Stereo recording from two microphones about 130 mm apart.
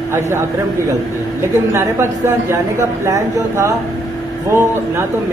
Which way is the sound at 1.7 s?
20° right (ahead or behind).